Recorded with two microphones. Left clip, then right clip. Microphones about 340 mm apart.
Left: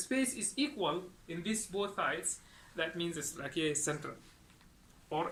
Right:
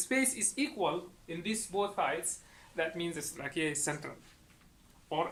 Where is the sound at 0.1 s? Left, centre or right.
Centre.